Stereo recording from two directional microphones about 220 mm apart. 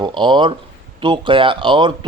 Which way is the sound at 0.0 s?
20° right (ahead or behind).